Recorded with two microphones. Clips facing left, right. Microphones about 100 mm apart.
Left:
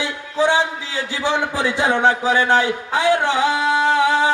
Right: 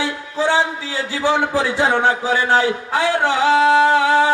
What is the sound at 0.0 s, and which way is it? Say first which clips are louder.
A man's voice: left 1 dB; 20° left (ahead or behind).